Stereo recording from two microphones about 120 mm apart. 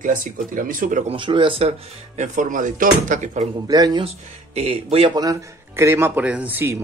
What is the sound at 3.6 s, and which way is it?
Speech, 30° right (ahead or behind).